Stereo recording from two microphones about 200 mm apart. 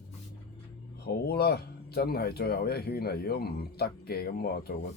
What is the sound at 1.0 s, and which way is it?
Speech, 50° left (ahead or behind).